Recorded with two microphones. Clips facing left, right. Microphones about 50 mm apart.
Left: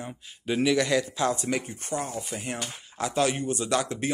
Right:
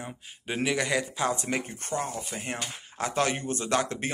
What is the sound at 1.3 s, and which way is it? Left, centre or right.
Speech, right.